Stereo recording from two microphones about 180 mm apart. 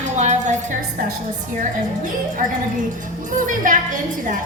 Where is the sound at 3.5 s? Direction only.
45° right (ahead or behind).